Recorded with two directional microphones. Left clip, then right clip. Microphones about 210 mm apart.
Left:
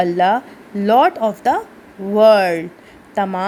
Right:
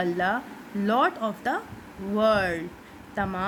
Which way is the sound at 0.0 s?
25° left (ahead or behind).